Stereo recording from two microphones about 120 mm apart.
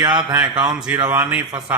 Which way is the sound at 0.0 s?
40° right (ahead or behind).